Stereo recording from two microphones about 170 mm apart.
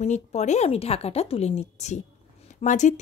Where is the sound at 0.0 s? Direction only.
40° left (ahead or behind).